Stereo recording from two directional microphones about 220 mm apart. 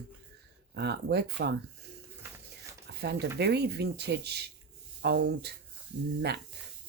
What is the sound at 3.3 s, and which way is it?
Speech, 50° right (ahead or behind).